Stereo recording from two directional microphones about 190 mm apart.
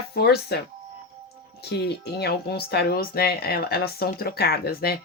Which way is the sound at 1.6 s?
60° left (ahead or behind).